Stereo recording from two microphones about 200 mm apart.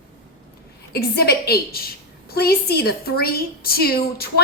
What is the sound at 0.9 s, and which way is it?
A woman's voice, 50° left (ahead or behind).